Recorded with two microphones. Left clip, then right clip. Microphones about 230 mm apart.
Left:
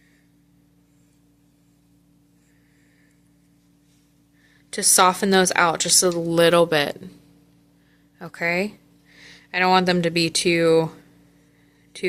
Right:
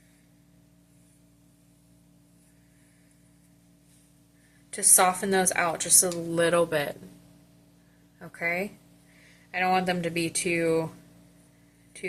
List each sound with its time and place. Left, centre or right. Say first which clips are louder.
4.7 s speech: left 6 dB; left
8.2 s speech: left 6 dB; left